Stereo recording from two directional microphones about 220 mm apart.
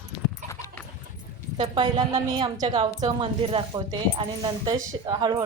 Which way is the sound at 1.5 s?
20° right (ahead or behind).